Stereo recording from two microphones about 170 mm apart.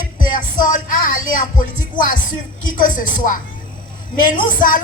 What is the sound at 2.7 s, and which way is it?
Speech, 55° left (ahead or behind).